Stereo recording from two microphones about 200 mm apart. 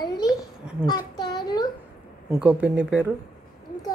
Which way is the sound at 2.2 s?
5° right (ahead or behind).